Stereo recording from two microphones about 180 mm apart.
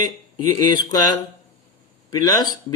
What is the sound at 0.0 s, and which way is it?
Speech, 20° left (ahead or behind).